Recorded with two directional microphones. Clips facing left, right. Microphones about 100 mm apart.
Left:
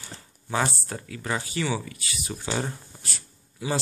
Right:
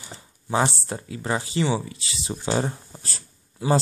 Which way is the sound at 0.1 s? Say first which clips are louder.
Right 4 dB; 25° right (ahead or behind).